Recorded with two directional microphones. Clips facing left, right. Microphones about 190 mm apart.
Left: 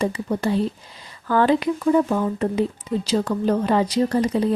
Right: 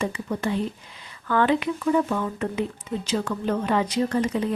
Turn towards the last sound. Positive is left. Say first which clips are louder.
# left 4 dB
turn(degrees=35)  # may be behind; listen again after turning